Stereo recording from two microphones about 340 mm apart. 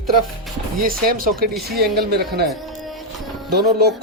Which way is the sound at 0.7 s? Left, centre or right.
Right.